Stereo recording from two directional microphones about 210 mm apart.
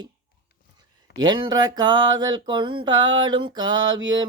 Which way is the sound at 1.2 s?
20° right (ahead or behind).